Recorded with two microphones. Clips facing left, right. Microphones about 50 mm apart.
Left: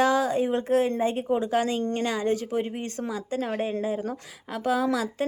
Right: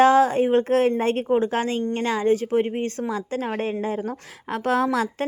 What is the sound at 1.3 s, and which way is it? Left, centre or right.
Speech, right.